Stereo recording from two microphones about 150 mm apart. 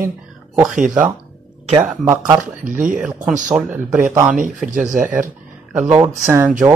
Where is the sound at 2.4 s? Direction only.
60° right (ahead or behind).